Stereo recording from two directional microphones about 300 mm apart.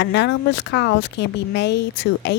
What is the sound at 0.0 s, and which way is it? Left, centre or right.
Speech, left.